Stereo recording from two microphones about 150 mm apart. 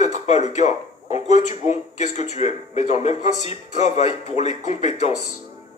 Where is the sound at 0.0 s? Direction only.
50° left (ahead or behind).